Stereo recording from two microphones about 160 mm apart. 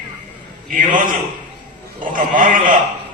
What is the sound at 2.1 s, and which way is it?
Speech, 55° right (ahead or behind).